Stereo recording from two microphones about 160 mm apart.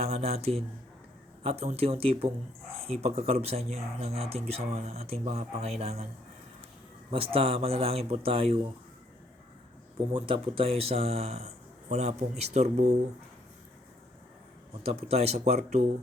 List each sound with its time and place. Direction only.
0.0 s speech: 40° right (ahead or behind)
7.1 s speech: 35° right (ahead or behind)
10.1 s speech: 35° right (ahead or behind)
14.8 s speech: 40° right (ahead or behind)